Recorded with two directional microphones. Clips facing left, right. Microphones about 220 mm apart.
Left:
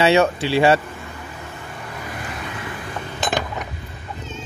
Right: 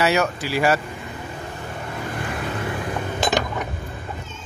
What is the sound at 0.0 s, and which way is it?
Speech, 30° left (ahead or behind).